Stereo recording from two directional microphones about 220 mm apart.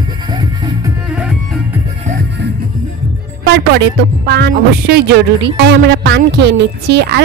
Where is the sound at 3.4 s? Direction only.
50° right (ahead or behind).